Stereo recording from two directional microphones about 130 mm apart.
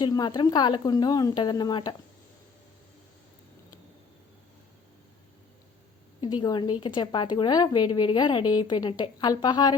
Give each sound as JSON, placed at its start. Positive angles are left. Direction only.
{"t": 0.0, "sound": "a woman's voice", "side_deg": 30}
{"t": 6.1, "sound": "a woman's voice", "side_deg": 35}